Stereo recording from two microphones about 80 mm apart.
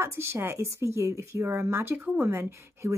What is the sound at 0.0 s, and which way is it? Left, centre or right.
Speech, right.